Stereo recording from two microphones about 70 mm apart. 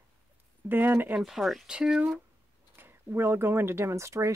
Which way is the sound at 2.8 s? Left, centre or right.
Right.